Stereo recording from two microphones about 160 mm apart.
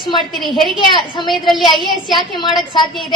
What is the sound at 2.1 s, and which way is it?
Speech, 25° left (ahead or behind).